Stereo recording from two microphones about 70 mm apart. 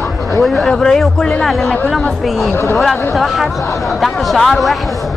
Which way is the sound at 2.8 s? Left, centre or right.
Centre.